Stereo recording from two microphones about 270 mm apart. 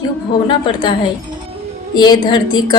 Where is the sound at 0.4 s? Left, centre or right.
Centre.